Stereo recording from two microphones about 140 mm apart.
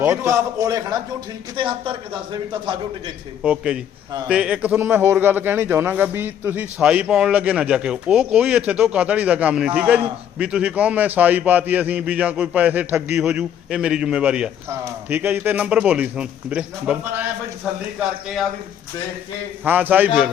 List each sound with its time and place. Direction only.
0.0 s a man's voice: 15° right (ahead or behind)
1.5 s a man's voice: 35° right (ahead or behind)
3.4 s a man's voice: 5° right (ahead or behind)
14.7 s a man's voice: 15° right (ahead or behind)
19.6 s a man's voice: 15° right (ahead or behind)